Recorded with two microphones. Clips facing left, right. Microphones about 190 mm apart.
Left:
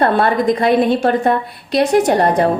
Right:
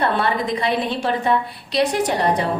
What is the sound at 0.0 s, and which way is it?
A woman's voice, 50° left (ahead or behind).